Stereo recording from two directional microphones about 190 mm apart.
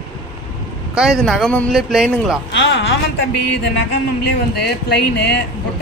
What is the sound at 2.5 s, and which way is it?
Speech, 70° left (ahead or behind).